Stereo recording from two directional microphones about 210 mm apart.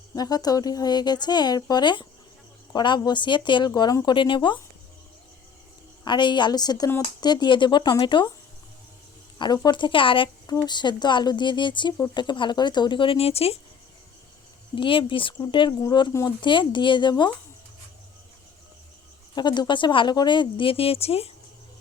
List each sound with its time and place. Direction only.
0.2 s speech: 20° left (ahead or behind)
6.1 s speech: 20° left (ahead or behind)
9.4 s speech: 20° left (ahead or behind)
14.8 s speech: 25° left (ahead or behind)
19.4 s speech: 20° left (ahead or behind)